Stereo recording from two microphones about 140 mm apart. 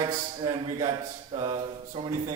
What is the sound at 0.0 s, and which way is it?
Speech, 40° right (ahead or behind).